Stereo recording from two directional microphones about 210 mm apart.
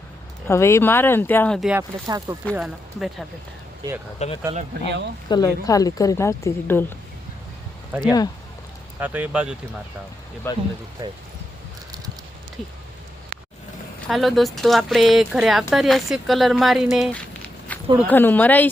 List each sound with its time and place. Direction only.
0.4 s a woman's voice: 10° left (ahead or behind)
1.7 s speech: 15° right (ahead or behind)
2.5 s speech: centre (ahead or behind)
4.2 s speech: 30° left (ahead or behind)
4.9 s speech: 55° right (ahead or behind)
5.3 s a woman's voice: 15° left (ahead or behind)
8.0 s speech: 20° left (ahead or behind)
9.0 s speech: 10° right (ahead or behind)
10.5 s a woman's voice: 10° left (ahead or behind)
11.0 s speech: 15° right (ahead or behind)
14.1 s speech: centre (ahead or behind)
17.7 s a sound: 5° left (ahead or behind)
18.1 s a woman's voice: 10° left (ahead or behind)